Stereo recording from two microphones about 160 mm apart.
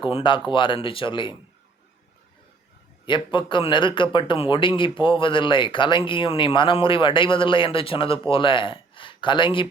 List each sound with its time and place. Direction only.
0.0 s a man's voice: 30° left (ahead or behind)
3.1 s a man's voice: 30° left (ahead or behind)